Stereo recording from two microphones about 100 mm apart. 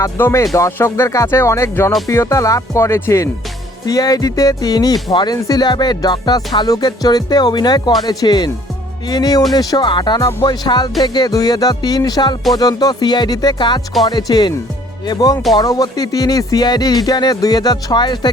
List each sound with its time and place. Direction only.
0.2 s speech: 25° left (ahead or behind)
2.0 s music: 30° left (ahead or behind)
5.1 s speech: 45° left (ahead or behind)
9.0 s music: 40° left (ahead or behind)
9.5 s speech: 40° left (ahead or behind)
11.0 s music: 45° left (ahead or behind)
12.5 s speech: 40° left (ahead or behind)
15.5 s music: 40° left (ahead or behind)